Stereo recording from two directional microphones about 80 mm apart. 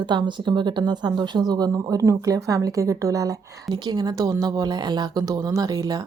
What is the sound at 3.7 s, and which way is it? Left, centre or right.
Speech, right.